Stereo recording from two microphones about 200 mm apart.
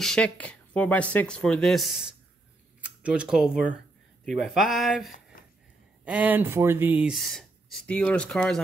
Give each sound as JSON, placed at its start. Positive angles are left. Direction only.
{"t": 0.0, "sound": "speech", "side_deg": 5}